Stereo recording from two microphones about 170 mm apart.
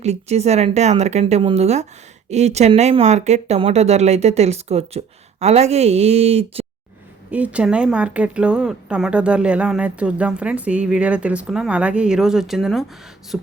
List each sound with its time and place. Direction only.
0.0 s speech: 40° right (ahead or behind)
7.3 s speech: 10° right (ahead or behind)
13.3 s beatboxing: 5° right (ahead or behind)